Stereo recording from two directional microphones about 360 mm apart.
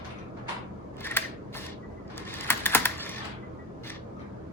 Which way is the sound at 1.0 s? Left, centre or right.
Centre.